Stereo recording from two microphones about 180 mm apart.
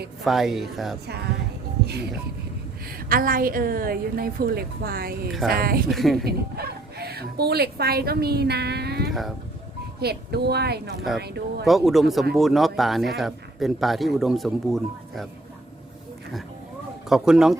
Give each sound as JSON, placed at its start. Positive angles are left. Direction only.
{"t": 0.3, "sound": "speech", "side_deg": 0}
{"t": 3.1, "sound": "a woman's voice", "side_deg": -50}
{"t": 5.9, "sound": "speech", "side_deg": 0}
{"t": 6.2, "sound": "speech", "side_deg": -60}
{"t": 11.6, "sound": "speech", "side_deg": 0}
{"t": 17.1, "sound": "speech", "side_deg": -5}